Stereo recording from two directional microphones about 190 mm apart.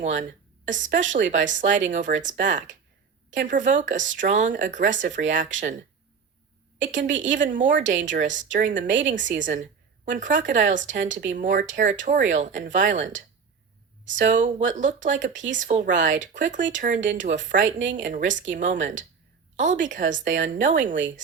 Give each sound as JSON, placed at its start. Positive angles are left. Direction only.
{"t": 0.0, "sound": "a woman's voice", "side_deg": -40}
{"t": 6.8, "sound": "a woman's voice", "side_deg": -40}
{"t": 17.7, "sound": "a woman's voice", "side_deg": -80}
{"t": 17.9, "sound": "speech", "side_deg": -40}